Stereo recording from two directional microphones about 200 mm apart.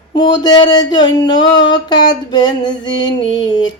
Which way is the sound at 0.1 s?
20° left (ahead or behind).